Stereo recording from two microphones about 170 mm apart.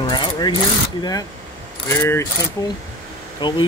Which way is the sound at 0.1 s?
25° left (ahead or behind).